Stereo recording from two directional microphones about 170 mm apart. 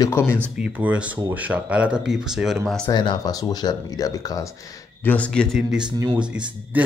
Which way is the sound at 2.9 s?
25° left (ahead or behind).